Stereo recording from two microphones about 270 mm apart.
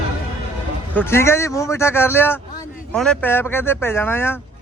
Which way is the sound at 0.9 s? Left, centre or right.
Centre.